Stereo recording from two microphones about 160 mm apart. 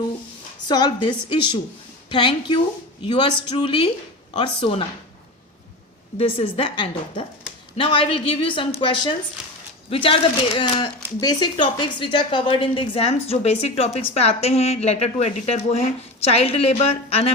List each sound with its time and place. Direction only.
0.7 s a woman's voice: 30° left (ahead or behind)
6.1 s a woman's voice: 35° left (ahead or behind)